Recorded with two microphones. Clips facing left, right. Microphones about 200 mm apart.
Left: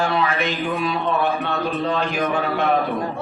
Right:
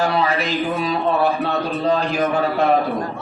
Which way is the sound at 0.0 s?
35° right (ahead or behind).